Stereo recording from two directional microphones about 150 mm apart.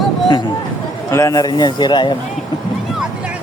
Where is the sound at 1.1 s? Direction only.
20° left (ahead or behind).